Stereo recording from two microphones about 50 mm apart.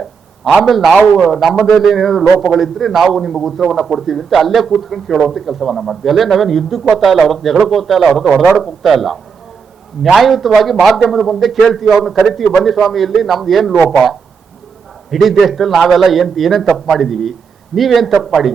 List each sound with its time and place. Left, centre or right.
0.6 s a man's voice: centre
10.2 s a man's voice: centre